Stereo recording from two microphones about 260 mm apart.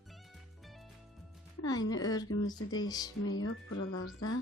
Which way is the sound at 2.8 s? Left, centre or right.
Centre.